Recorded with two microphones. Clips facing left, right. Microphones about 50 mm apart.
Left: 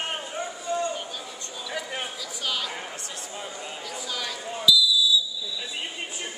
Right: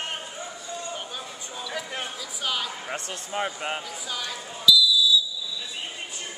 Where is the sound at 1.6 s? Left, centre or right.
Centre.